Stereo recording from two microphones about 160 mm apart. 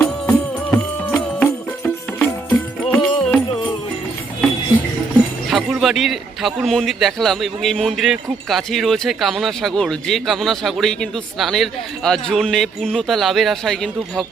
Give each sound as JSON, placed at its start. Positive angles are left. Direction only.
{"t": 0.0, "sound": "music", "side_deg": 15}
{"t": 5.5, "sound": "a man's voice", "side_deg": 0}